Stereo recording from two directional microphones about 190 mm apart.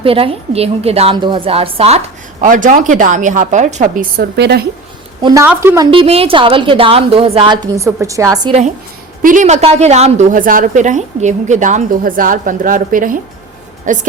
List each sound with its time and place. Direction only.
0.0 s a woman's voice: 30° right (ahead or behind)
2.4 s a woman's voice: 45° right (ahead or behind); by 4.6 s 60° right (ahead or behind)
5.2 s speech: 15° right (ahead or behind)
5.9 s a woman's voice: 30° right (ahead or behind)
9.2 s a woman's voice: 40° right (ahead or behind)